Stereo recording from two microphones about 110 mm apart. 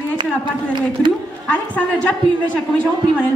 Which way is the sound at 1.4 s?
15° left (ahead or behind).